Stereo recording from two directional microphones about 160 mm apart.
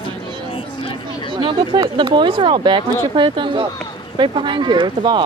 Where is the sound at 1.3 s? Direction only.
30° right (ahead or behind).